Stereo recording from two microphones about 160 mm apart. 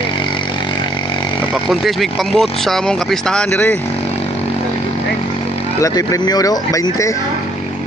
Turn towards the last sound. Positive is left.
turn(degrees=20)  # may be behind; listen again after turning